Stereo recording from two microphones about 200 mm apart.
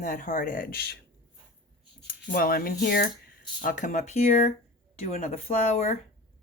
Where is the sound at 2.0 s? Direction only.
45° left (ahead or behind).